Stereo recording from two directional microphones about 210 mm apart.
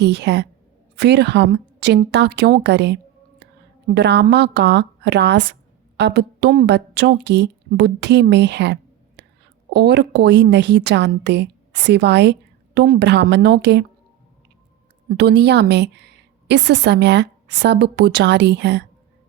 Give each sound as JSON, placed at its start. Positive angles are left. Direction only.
{"t": 0.0, "sound": "a woman's voice", "side_deg": -55}
{"t": 15.1, "sound": "a woman's voice", "side_deg": -50}